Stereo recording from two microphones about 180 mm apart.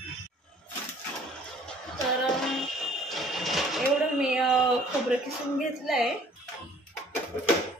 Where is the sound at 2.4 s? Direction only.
Centre (ahead or behind).